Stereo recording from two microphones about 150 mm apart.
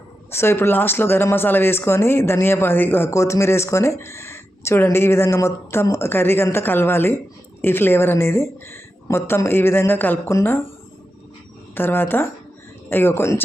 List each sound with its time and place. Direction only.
0.3 s speech: 15° left (ahead or behind)
11.7 s speech: 15° left (ahead or behind)